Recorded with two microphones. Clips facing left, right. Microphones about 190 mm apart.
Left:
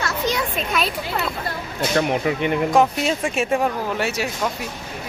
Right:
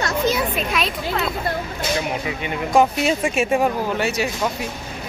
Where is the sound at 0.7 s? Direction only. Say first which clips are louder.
Even; centre (ahead or behind).